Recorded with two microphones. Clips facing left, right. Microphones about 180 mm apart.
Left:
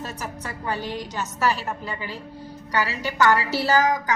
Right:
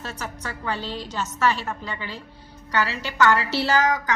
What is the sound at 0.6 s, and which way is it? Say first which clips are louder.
Speech: left 1 dB; 15° left (ahead or behind).